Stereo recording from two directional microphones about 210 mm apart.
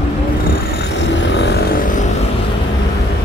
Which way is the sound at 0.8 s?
55° left (ahead or behind).